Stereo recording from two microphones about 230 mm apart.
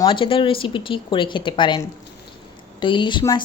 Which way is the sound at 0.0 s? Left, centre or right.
Left.